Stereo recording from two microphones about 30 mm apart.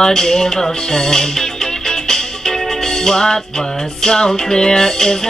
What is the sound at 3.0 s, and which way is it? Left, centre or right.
Music, left.